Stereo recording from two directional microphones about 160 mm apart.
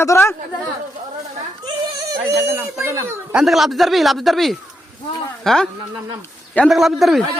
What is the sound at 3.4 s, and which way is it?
Speech, centre (ahead or behind).